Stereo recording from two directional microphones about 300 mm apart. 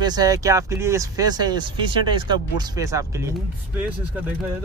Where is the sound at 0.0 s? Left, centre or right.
Centre.